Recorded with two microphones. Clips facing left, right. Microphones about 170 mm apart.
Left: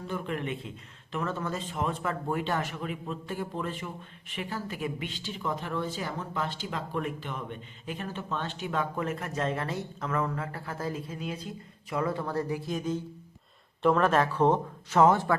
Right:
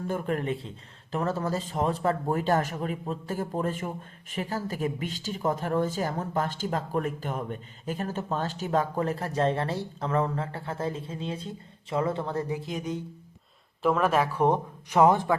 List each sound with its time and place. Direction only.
0.1 s speech: 40° right (ahead or behind); by 13.0 s 20° right (ahead or behind)
13.8 s speech: 5° right (ahead or behind)